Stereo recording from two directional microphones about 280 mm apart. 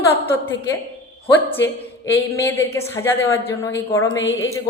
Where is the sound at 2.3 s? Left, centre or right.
Centre.